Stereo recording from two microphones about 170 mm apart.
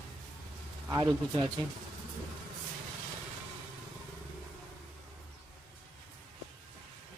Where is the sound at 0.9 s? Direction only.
25° right (ahead or behind).